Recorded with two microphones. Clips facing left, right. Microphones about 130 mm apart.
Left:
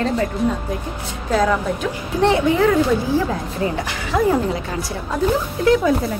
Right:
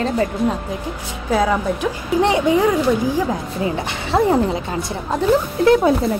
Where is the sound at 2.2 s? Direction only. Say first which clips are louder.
Even; 15° right (ahead or behind); by 6.1 s 30° right (ahead or behind).